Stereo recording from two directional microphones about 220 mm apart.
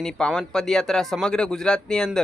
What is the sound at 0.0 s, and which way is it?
A man's voice, centre (ahead or behind).